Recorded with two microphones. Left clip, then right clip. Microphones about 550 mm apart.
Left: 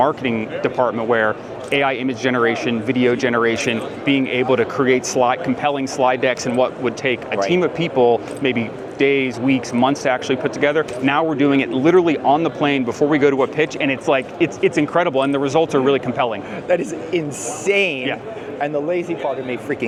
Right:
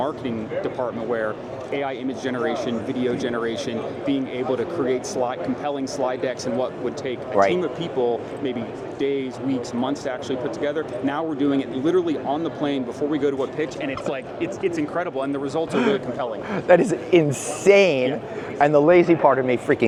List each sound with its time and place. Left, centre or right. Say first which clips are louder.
0.0 s speech: left 8 dB; left
16.6 s speech: right 3 dB; right